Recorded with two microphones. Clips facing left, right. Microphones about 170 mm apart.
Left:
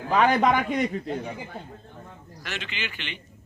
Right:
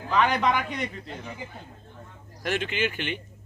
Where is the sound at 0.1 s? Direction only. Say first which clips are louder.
Left 3 dB; 50° left (ahead or behind).